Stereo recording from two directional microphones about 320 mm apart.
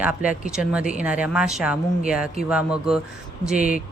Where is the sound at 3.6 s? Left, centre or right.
Left.